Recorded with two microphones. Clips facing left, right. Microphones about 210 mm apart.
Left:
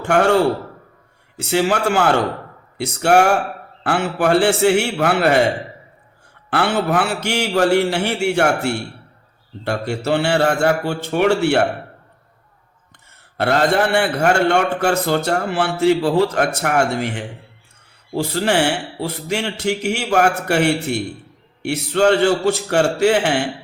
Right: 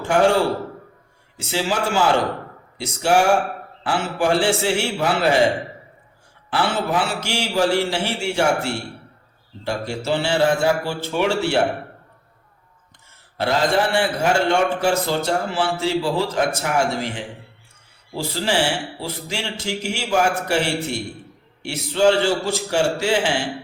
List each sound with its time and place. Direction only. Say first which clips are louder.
0.0 s a man's voice: left 1 dB; 65° left (ahead or behind)
1.4 s a man's voice: left 5 dB; 60° left (ahead or behind)
6.5 s a man's voice: left 3 dB; 60° left (ahead or behind)
13.3 s a man's voice: left 3 dB; 60° left (ahead or behind)